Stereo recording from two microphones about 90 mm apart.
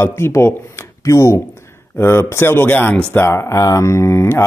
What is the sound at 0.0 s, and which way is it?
Speech, 30° left (ahead or behind).